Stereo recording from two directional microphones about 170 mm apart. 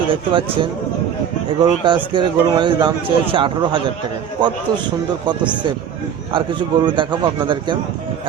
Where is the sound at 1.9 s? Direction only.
30° right (ahead or behind).